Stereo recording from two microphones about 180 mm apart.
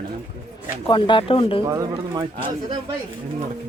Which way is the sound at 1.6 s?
20° right (ahead or behind).